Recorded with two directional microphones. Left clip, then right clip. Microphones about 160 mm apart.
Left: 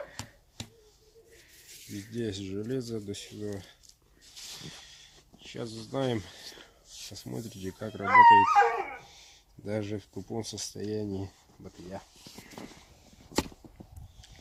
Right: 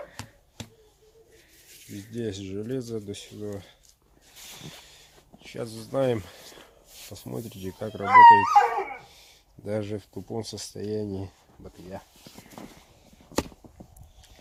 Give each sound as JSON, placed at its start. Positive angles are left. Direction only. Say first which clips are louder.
{"t": 1.6, "sound": "a sound", "louder": "even", "side_deg": 0}
{"t": 2.1, "sound": "speech", "louder": "right 2 dB", "side_deg": -20}
{"t": 4.6, "sound": "a sound", "louder": "right 1 dB", "side_deg": -25}
{"t": 7.1, "sound": "speech", "louder": "right 5 dB", "side_deg": -20}
{"t": 8.0, "sound": "speech", "louder": "right 5 dB", "side_deg": -90}
{"t": 9.6, "sound": "speech", "louder": "right 3 dB", "side_deg": -30}